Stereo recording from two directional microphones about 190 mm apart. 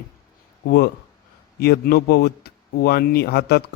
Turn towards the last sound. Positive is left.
turn(degrees=55)  # may be behind; listen again after turning